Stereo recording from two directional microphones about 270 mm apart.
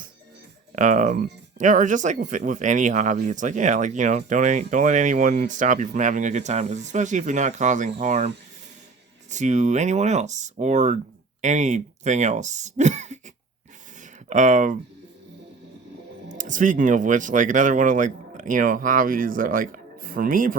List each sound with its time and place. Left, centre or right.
0.8 s speech: right
9.3 s speech: right
14.3 s speech: right
16.4 s speech: right